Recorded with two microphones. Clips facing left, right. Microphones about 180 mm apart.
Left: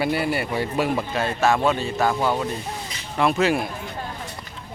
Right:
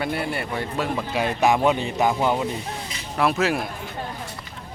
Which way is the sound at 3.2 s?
Centre (ahead or behind).